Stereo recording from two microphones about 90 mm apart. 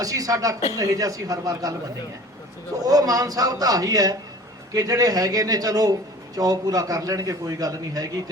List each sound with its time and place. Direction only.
0.0 s a man's voice: 40° right (ahead or behind)
2.8 s a man's voice: 40° right (ahead or behind)